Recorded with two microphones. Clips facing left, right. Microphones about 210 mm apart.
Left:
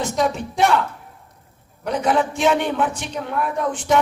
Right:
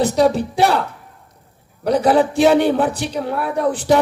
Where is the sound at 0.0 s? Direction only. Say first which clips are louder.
Right 6 dB; 35° right (ahead or behind).